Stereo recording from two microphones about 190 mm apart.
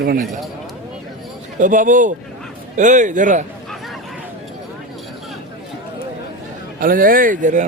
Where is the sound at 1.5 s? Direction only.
45° right (ahead or behind).